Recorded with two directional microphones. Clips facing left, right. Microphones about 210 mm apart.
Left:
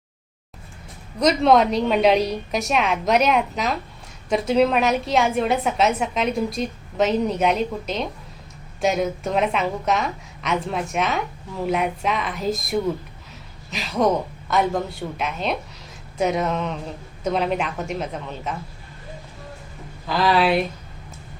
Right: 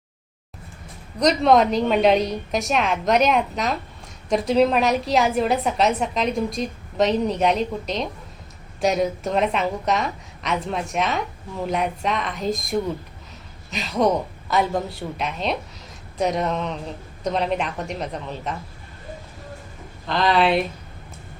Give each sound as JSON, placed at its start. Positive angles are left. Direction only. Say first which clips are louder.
{"t": 1.2, "sound": "a woman's voice", "louder": "even", "side_deg": 0}
{"t": 20.1, "sound": "a woman's voice", "louder": "even", "side_deg": 5}